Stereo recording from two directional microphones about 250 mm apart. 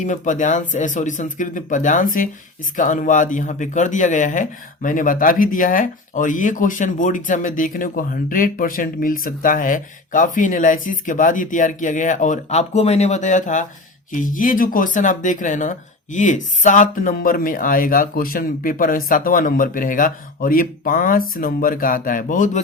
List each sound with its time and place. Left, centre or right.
0.0 s speech: left